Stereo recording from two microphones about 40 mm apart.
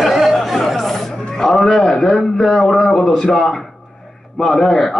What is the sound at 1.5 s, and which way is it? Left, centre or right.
A man's voice, centre.